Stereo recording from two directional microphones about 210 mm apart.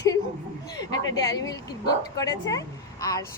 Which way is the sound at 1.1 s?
15° left (ahead or behind).